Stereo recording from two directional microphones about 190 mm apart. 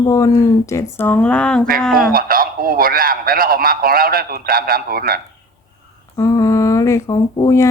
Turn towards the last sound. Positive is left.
turn(degrees=20)  # may be behind; listen again after turning